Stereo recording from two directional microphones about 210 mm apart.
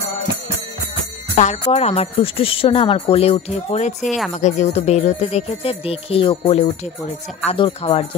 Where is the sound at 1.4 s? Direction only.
30° left (ahead or behind).